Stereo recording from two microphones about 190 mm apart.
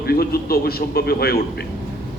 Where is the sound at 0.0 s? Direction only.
55° left (ahead or behind).